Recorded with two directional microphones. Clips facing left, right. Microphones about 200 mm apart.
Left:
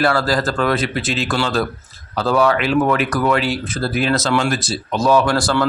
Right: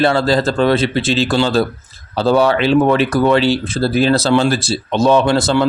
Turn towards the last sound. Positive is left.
turn(degrees=-20)  # may be behind; listen again after turning